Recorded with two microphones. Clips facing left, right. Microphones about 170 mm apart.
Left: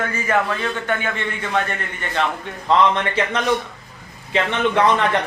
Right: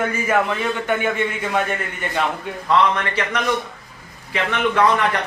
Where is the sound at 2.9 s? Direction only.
25° left (ahead or behind).